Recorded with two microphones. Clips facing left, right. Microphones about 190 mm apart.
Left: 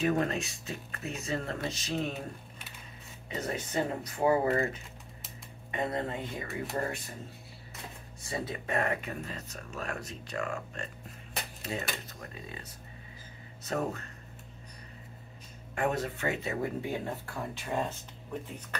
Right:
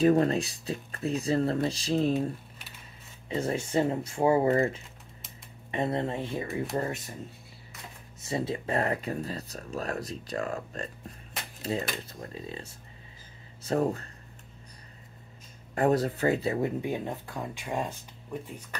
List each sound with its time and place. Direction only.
0.0 s speech: 35° right (ahead or behind)
3.3 s speech: 30° right (ahead or behind)
8.2 s speech: 25° right (ahead or behind)
15.7 s speech: 35° right (ahead or behind)
16.8 s speech: 15° right (ahead or behind)